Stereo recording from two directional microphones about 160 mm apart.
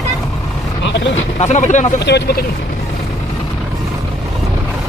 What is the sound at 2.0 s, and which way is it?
Speech, 90° left.